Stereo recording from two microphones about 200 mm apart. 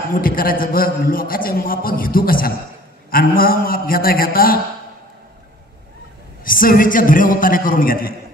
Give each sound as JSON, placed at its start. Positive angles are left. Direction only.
{"t": 0.1, "sound": "a man's voice", "side_deg": 45}
{"t": 6.4, "sound": "a man's voice", "side_deg": 45}